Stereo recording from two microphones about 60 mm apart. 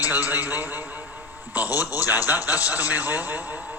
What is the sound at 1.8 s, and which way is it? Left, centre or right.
A man's voice, right.